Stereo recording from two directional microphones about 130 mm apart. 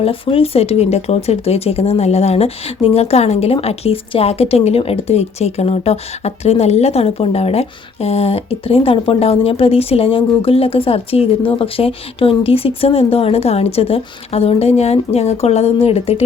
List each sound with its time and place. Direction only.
0.0 s speech: 45° left (ahead or behind)